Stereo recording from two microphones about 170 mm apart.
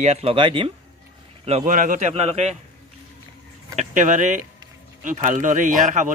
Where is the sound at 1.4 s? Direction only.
40° right (ahead or behind).